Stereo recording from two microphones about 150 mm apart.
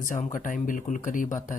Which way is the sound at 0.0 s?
60° left (ahead or behind).